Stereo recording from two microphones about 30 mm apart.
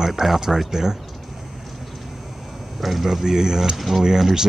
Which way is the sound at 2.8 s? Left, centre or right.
Centre.